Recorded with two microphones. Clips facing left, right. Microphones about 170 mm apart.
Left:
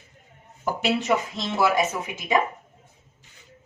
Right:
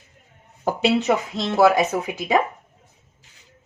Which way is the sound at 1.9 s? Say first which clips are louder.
Right 6 dB; 50° right (ahead or behind).